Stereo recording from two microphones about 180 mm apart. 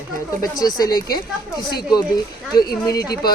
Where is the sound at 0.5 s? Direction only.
20° left (ahead or behind).